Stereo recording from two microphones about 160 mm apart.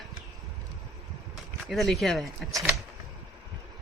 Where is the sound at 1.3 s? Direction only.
Centre (ahead or behind).